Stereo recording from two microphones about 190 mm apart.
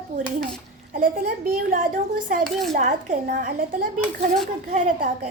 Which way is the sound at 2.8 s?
45° right (ahead or behind).